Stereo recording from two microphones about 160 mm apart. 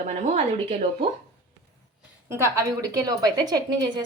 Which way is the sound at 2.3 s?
15° right (ahead or behind).